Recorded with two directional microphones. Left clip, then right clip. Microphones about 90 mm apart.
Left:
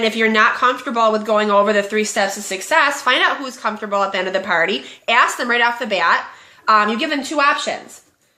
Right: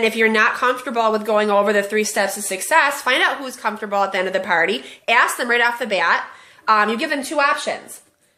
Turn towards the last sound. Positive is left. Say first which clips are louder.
# left 2 dB
turn(degrees=-30)  # may be behind; listen again after turning